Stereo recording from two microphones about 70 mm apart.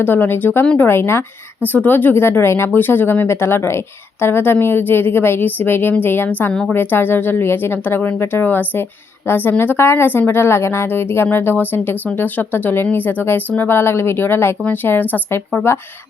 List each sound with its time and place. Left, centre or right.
0.0 s speech: left
1.6 s speech: left
6.5 s a woman's voice: centre
6.7 s speech: left